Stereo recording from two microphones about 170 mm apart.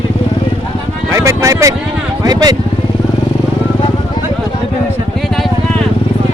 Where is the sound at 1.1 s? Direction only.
15° right (ahead or behind).